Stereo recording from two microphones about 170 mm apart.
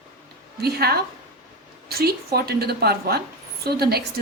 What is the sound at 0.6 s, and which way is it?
A woman's voice, 65° right (ahead or behind).